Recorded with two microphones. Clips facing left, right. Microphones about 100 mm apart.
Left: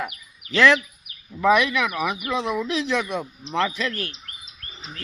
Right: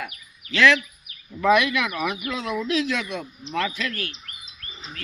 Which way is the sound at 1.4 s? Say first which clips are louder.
Left 1 dB; 10° left (ahead or behind).